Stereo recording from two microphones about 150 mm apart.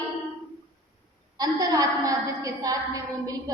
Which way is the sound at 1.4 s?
25° right (ahead or behind).